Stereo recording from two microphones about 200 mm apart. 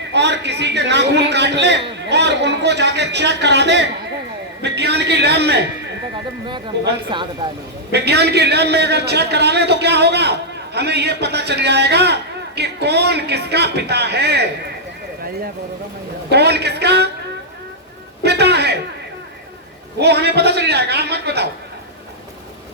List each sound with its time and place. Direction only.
0.1 s a man's voice: 60° right (ahead or behind)
7.1 s speech: 25° right (ahead or behind)
7.9 s a man's voice: 55° right (ahead or behind)
16.3 s a man's voice: 55° right (ahead or behind)
18.2 s a man's voice: 55° right (ahead or behind)
20.0 s a man's voice: 55° right (ahead or behind)